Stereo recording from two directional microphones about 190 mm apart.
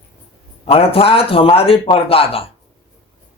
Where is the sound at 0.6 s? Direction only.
30° left (ahead or behind).